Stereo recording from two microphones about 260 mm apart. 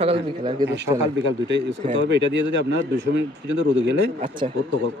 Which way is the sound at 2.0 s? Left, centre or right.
Right.